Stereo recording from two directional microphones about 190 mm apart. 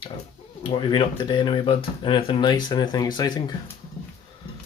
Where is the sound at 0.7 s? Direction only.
25° left (ahead or behind).